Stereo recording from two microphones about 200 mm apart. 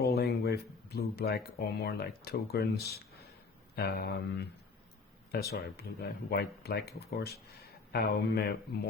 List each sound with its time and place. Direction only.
0.0 s speech: 55° left (ahead or behind)